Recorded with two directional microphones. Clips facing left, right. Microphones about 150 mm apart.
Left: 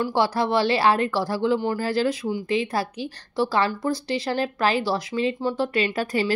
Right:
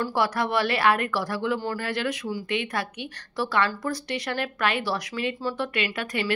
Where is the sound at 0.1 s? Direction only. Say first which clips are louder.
Left 3 dB; 30° left (ahead or behind).